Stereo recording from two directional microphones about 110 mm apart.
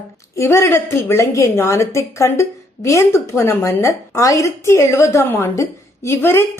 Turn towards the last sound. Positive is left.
turn(degrees=20)  # may be behind; listen again after turning